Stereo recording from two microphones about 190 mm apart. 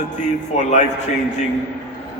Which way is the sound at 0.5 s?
40° left (ahead or behind).